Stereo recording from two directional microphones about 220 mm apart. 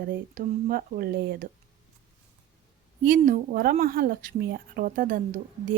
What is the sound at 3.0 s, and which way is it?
Speech, 35° right (ahead or behind).